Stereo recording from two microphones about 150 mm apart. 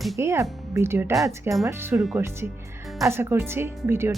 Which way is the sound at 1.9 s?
Centre (ahead or behind).